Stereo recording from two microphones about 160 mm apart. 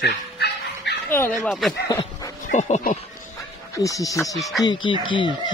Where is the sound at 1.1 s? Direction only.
15° left (ahead or behind).